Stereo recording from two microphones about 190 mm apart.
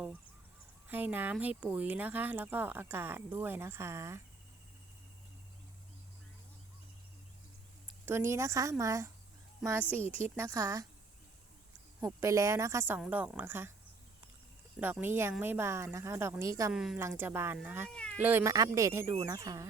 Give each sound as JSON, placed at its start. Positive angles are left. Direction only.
{"t": 0.9, "sound": "speech", "side_deg": -10}
{"t": 8.0, "sound": "speech", "side_deg": -15}
{"t": 9.6, "sound": "a woman's voice", "side_deg": 0}
{"t": 10.3, "sound": "speech", "side_deg": -15}
{"t": 12.0, "sound": "speech", "side_deg": -15}
{"t": 14.8, "sound": "speech", "side_deg": -10}
{"t": 16.7, "sound": "a woman's voice", "side_deg": -5}
{"t": 17.9, "sound": "speech", "side_deg": 5}
{"t": 18.2, "sound": "speech", "side_deg": -10}